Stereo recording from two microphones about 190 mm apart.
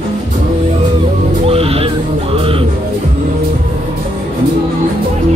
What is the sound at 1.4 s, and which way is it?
Music, 30° right (ahead or behind).